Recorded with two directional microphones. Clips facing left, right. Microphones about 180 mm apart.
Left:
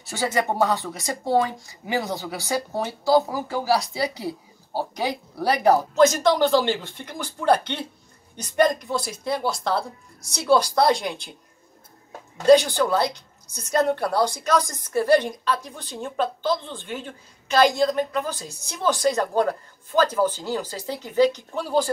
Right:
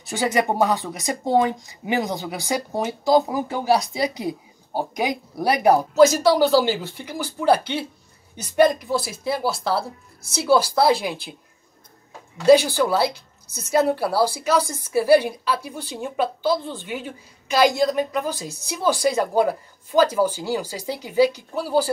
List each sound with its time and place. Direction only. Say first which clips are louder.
0.0 s speech: right 3 dB; 15° right (ahead or behind)
12.4 s speech: right 1 dB; 5° right (ahead or behind)